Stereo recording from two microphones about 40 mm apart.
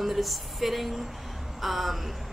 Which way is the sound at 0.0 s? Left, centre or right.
Centre.